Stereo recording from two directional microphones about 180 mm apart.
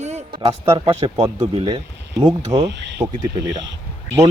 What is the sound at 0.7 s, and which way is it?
Speech, 25° right (ahead or behind).